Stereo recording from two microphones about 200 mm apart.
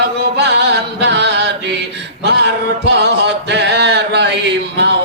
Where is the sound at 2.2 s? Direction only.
60° right (ahead or behind).